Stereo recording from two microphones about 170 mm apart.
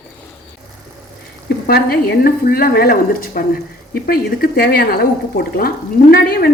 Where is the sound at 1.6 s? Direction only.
65° left (ahead or behind).